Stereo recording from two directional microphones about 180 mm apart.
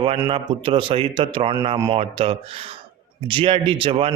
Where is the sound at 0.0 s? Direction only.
30° right (ahead or behind).